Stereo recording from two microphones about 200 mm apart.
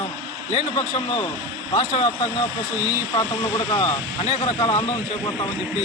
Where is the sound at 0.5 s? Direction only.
25° left (ahead or behind).